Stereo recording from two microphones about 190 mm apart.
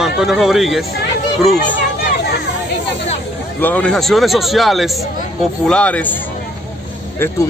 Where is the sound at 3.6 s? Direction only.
5° left (ahead or behind).